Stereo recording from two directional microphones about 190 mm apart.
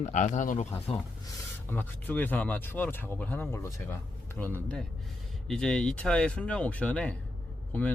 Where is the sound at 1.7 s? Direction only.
10° left (ahead or behind).